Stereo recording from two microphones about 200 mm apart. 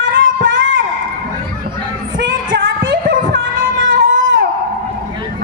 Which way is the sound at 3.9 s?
60° right (ahead or behind).